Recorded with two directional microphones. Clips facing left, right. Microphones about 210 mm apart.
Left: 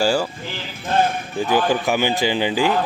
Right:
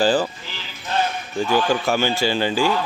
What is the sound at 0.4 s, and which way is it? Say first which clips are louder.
Music: left 5 dB; 50° left (ahead or behind).